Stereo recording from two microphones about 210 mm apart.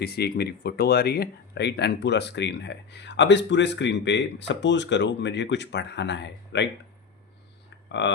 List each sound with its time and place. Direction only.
0.0 s speech: 50° left (ahead or behind)
8.0 s speech: 60° left (ahead or behind)